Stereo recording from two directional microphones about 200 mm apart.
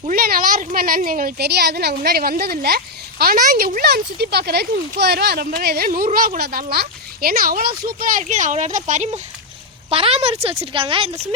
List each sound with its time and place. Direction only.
0.0 s speech: 45° right (ahead or behind); by 11.3 s 25° right (ahead or behind)